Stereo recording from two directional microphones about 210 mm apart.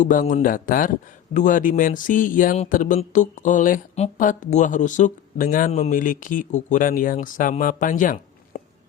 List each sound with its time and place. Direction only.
0.0 s speech: 40° left (ahead or behind)